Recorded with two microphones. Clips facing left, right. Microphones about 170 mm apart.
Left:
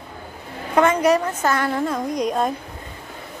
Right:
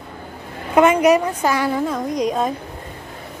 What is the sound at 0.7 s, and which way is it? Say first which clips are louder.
A woman's voice: right 3 dB; 15° right (ahead or behind).